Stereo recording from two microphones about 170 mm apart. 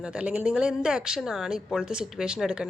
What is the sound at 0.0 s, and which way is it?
Speech, 5° right (ahead or behind).